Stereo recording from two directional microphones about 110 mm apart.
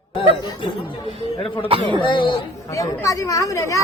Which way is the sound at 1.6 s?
55° right (ahead or behind).